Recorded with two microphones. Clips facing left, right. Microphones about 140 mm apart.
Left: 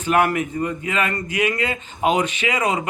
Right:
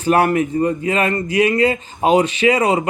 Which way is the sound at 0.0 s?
35° right (ahead or behind).